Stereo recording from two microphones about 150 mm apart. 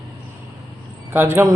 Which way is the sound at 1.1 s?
15° right (ahead or behind).